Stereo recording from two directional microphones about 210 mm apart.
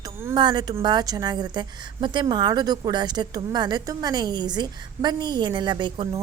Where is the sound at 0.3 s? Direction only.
20° right (ahead or behind).